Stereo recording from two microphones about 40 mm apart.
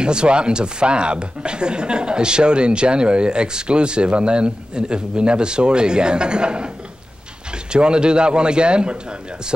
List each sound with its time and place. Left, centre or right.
0.0 s speech: right
7.7 s speech: right